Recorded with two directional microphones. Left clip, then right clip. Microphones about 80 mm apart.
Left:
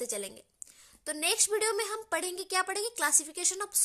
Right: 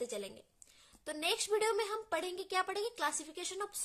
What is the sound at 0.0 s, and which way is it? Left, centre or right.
A woman's voice, left.